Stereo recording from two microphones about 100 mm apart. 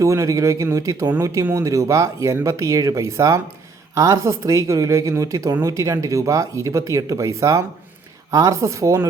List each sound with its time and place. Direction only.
0.0 s speech: 30° right (ahead or behind)